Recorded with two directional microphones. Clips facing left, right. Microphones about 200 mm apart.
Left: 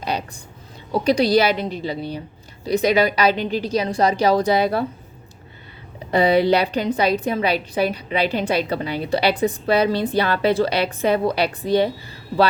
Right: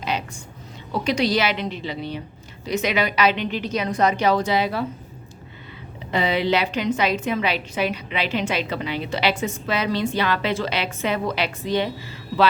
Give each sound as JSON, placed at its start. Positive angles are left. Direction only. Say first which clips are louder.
{"t": 1.0, "sound": "a woman's voice", "louder": "left 5 dB", "side_deg": 35}
{"t": 6.1, "sound": "a woman's voice", "louder": "left 6 dB", "side_deg": 35}